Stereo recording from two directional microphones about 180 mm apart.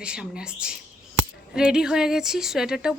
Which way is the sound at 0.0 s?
5° right (ahead or behind).